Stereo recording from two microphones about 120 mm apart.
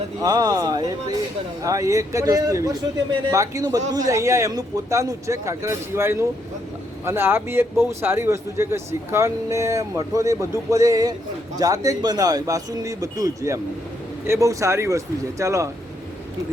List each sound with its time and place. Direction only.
0.2 s speech: 30° right (ahead or behind)